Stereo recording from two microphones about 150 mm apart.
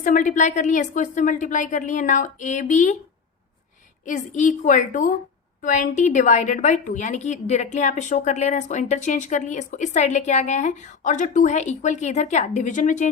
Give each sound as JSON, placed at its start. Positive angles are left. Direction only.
{"t": 0.0, "sound": "a woman's voice", "side_deg": 60}
{"t": 4.0, "sound": "a woman's voice", "side_deg": 55}